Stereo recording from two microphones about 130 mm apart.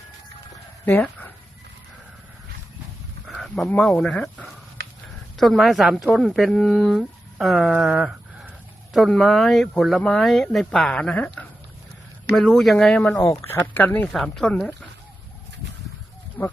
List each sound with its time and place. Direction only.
0.9 s speech: 15° left (ahead or behind)
3.2 s speech: 5° left (ahead or behind)
13.1 s speech: 25° left (ahead or behind); by 14.8 s 5° left (ahead or behind)
16.4 s speech: 15° left (ahead or behind)